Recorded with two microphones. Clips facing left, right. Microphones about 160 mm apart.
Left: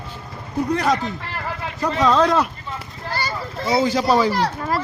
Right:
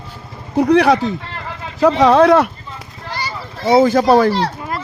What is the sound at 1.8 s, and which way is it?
Speech, 85° right.